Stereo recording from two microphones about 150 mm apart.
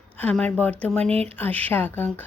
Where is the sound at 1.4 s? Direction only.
10° left (ahead or behind).